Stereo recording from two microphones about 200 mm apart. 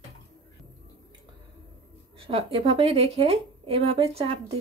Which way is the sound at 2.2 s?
25° right (ahead or behind).